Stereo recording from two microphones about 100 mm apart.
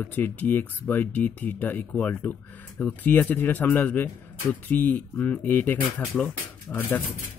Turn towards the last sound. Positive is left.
turn(degrees=15)  # may be behind; listen again after turning